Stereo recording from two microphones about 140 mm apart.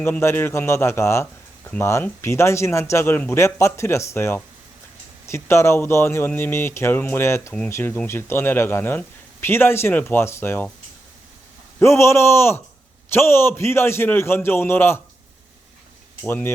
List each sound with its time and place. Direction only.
0.0 s a man's voice: 15° left (ahead or behind)
11.8 s a man's voice: 20° left (ahead or behind)
16.2 s a man's voice: 15° left (ahead or behind)